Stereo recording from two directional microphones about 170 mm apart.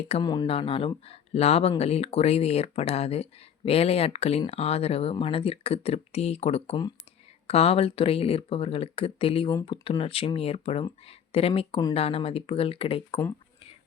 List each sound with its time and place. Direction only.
0.2 s speech: 25° left (ahead or behind)
9.5 s speech: 20° left (ahead or behind)
9.8 s speech: 30° left (ahead or behind)